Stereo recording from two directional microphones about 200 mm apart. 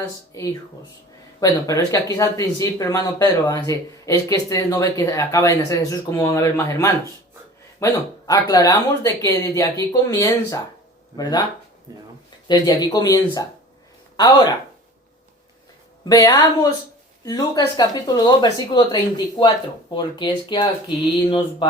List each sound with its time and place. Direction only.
0.3 s speech: 15° left (ahead or behind)
11.9 s a man's voice: 15° right (ahead or behind)
12.5 s speech: 20° left (ahead or behind)
16.0 s speech: 20° left (ahead or behind)